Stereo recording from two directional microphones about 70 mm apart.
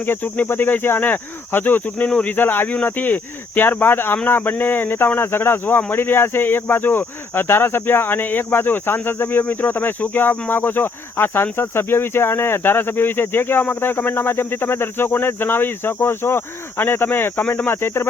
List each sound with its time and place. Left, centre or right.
0.0 s speech: left
2.0 s speech: centre
2.3 s speech: left